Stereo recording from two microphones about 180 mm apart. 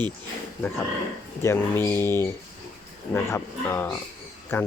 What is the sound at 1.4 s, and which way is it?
Speech, 15° left (ahead or behind).